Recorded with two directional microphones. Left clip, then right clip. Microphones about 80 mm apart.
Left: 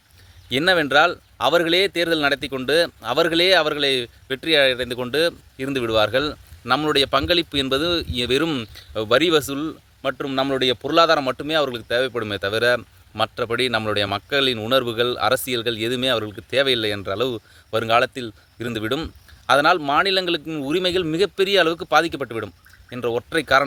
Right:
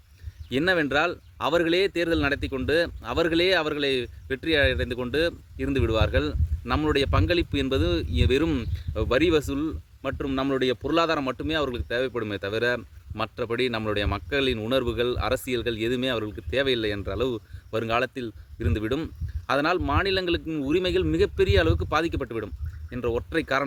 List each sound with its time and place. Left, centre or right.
0.5 s speech: right